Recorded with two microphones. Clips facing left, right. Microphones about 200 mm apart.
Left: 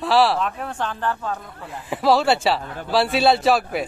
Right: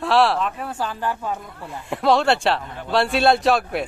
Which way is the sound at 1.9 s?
Centre (ahead or behind).